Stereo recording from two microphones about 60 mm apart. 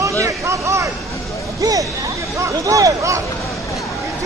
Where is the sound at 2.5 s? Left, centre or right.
Right.